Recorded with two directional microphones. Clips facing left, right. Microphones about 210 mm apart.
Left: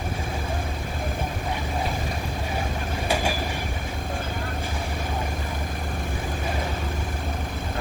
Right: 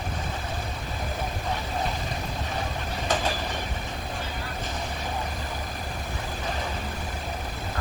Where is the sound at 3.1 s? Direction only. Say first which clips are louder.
Left 2 dB; 10° left (ahead or behind).